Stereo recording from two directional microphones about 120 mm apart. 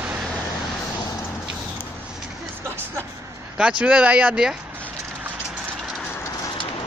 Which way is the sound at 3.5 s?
10° right (ahead or behind).